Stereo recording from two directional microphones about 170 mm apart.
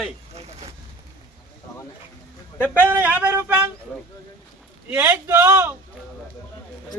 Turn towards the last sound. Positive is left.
turn(degrees=-15)  # may be behind; listen again after turning